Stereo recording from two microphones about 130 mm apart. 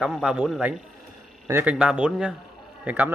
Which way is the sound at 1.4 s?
20° right (ahead or behind).